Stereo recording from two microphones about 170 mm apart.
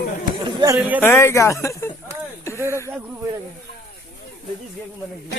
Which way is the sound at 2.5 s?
15° right (ahead or behind).